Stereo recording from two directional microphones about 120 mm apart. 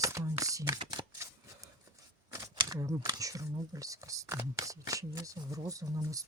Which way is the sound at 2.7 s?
30° right (ahead or behind).